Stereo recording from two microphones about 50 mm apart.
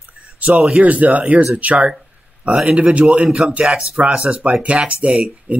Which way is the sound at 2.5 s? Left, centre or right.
Centre.